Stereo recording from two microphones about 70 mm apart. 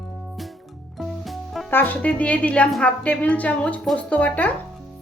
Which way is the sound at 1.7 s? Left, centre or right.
Left.